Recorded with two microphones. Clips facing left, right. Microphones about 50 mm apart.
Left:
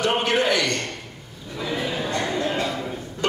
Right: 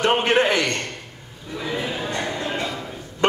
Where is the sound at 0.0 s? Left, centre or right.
Right.